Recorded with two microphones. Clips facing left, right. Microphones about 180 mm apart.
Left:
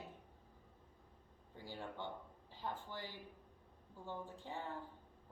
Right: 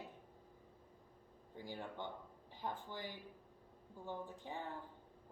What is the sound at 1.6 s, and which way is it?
A woman's voice, 15° right (ahead or behind).